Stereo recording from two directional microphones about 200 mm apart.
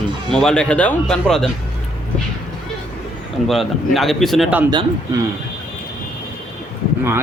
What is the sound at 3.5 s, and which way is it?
A man's voice, centre (ahead or behind).